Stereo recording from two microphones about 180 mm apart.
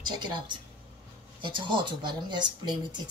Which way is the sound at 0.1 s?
25° right (ahead or behind).